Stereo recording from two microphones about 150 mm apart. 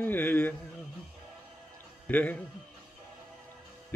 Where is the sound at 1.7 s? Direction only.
10° left (ahead or behind).